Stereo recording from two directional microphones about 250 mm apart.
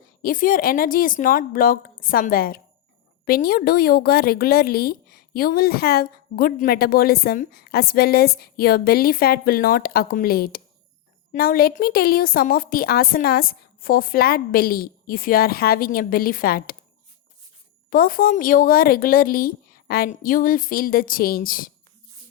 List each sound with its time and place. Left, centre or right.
0.2 s a woman's voice: left
17.9 s a woman's voice: left